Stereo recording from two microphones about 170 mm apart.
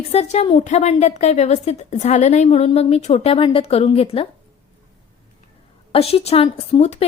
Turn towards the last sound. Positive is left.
turn(degrees=40)  # may be behind; listen again after turning